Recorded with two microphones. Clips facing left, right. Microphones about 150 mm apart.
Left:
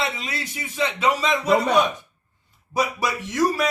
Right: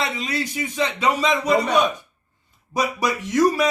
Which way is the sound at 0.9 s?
Centre (ahead or behind).